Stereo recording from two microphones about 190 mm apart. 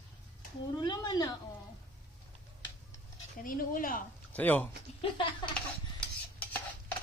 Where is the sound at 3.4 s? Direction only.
45° left (ahead or behind).